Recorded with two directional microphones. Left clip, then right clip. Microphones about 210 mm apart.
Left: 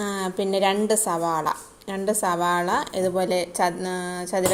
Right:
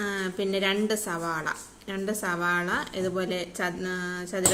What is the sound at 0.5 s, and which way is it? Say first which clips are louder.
A woman's voice: left 6 dB; 15° left (ahead or behind).